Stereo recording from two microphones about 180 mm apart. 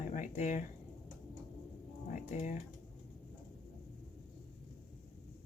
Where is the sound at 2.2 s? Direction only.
40° left (ahead or behind).